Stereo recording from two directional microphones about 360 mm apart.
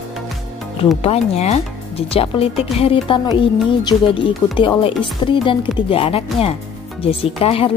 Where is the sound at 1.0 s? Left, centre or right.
Centre.